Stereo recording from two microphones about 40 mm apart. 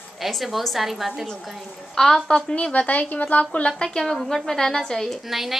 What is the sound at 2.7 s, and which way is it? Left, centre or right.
Speech, left.